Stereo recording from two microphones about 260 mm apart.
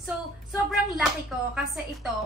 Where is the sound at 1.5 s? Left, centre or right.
Centre.